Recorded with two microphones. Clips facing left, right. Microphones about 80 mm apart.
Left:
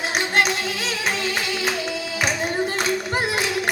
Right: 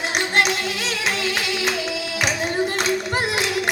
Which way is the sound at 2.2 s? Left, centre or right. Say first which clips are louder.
Right 1 dB; centre.